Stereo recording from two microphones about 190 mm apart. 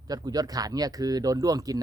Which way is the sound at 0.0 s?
20° right (ahead or behind).